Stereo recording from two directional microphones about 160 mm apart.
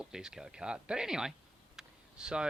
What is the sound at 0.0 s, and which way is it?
Speech, 5° right (ahead or behind).